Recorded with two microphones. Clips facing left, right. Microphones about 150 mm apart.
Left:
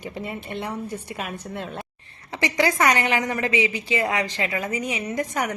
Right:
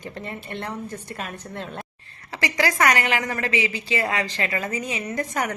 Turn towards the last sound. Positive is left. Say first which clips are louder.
# left 1 dB
turn(degrees=15)  # may be behind; listen again after turning